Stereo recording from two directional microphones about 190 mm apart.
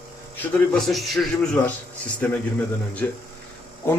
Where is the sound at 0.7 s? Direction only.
Centre (ahead or behind).